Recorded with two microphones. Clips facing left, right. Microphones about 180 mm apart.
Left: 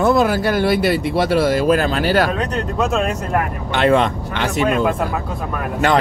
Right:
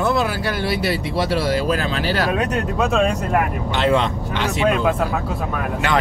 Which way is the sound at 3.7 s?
55° left (ahead or behind).